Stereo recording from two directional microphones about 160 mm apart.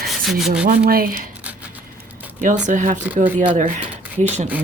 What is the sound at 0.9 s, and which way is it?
Speech, 65° right (ahead or behind).